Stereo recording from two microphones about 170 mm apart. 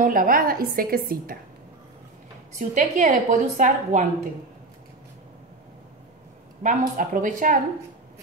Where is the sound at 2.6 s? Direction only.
45° right (ahead or behind).